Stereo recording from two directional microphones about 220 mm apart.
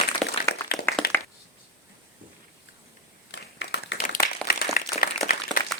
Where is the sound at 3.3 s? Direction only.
55° left (ahead or behind).